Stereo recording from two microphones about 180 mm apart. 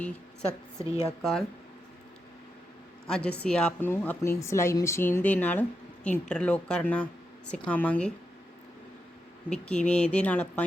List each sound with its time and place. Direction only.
0.8 s speech: 15° right (ahead or behind)
1.2 s speech: 5° left (ahead or behind)
3.1 s speech: 5° left (ahead or behind)
9.5 s speech: 5° left (ahead or behind)